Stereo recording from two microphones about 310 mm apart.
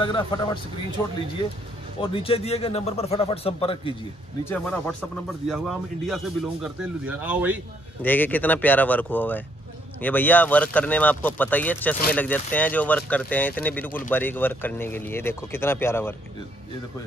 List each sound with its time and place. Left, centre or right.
0.0 s speech: centre
2.0 s a man's voice: centre
4.5 s speech: centre
8.0 s speech: centre